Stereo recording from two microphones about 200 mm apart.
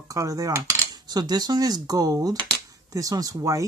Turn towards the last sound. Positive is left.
turn(degrees=-15)  # may be behind; listen again after turning